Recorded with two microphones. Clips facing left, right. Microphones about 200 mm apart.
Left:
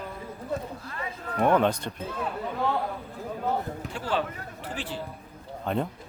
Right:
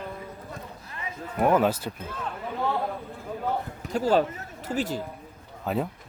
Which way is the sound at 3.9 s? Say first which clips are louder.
Right 9 dB; 40° right (ahead or behind).